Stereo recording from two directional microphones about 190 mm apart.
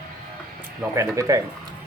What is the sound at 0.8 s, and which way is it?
Speech, 15° right (ahead or behind).